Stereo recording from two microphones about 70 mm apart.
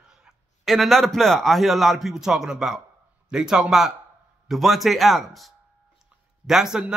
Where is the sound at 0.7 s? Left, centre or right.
Centre.